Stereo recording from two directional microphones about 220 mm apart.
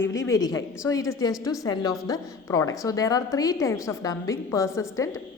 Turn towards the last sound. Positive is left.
turn(degrees=15)  # may be behind; listen again after turning